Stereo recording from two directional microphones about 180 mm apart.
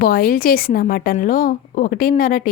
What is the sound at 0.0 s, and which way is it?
A woman's voice, 55° left (ahead or behind).